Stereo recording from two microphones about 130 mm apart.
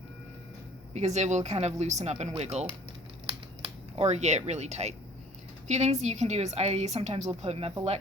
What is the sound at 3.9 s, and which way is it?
A woman's voice, 55° right (ahead or behind).